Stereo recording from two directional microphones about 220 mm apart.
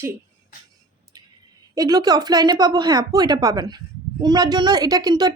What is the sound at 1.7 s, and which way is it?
A woman's voice, 15° right (ahead or behind).